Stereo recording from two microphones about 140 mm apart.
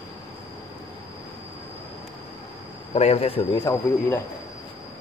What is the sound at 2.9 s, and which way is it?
Insect, 50° left (ahead or behind).